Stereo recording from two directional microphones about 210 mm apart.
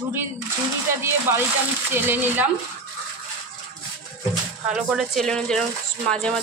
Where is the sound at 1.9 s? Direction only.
10° right (ahead or behind).